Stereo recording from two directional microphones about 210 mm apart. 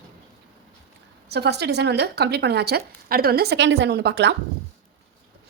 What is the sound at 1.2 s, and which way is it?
Speech, 50° right (ahead or behind).